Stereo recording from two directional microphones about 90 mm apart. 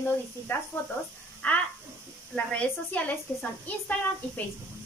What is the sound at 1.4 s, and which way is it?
Speech, 15° left (ahead or behind).